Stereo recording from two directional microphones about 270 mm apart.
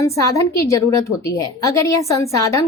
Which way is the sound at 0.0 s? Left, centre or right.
Centre.